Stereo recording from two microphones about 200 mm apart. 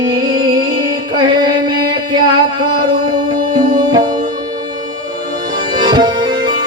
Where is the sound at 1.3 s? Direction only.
20° right (ahead or behind).